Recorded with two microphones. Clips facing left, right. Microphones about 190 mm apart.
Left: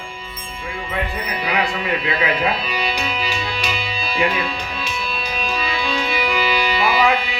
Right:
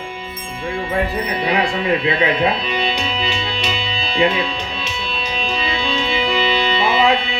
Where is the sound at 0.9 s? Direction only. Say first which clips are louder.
Right 4 dB; 30° right (ahead or behind).